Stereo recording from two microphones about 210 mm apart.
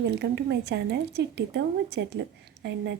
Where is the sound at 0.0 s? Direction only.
55° right (ahead or behind).